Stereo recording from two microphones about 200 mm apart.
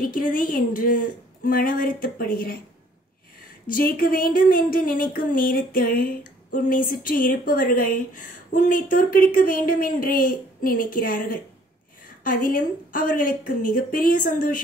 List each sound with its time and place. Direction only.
0.0 s a woman's voice: 45° left (ahead or behind)
3.6 s a woman's voice: 45° left (ahead or behind)